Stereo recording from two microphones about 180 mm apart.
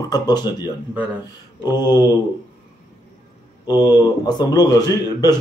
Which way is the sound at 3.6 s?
20° left (ahead or behind).